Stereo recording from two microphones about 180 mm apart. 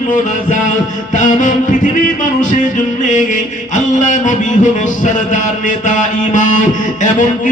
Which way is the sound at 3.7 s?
45° left (ahead or behind).